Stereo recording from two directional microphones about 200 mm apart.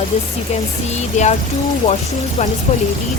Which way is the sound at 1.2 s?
35° left (ahead or behind).